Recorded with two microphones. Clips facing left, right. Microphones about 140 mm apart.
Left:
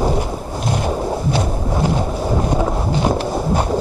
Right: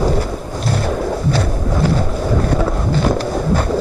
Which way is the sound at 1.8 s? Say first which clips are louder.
Right 1 dB; 15° left (ahead or behind).